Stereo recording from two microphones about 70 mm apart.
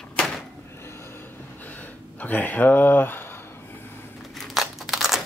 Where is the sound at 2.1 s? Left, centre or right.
Left.